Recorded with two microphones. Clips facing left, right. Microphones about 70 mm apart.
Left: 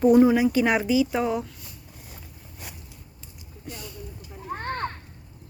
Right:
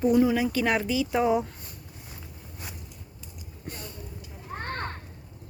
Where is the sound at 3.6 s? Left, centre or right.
Right.